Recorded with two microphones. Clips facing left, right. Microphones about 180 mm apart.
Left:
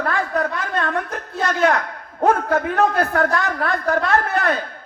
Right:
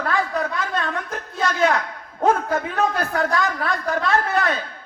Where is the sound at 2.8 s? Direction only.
55° left (ahead or behind).